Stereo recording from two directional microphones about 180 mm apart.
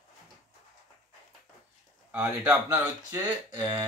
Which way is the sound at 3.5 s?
25° right (ahead or behind).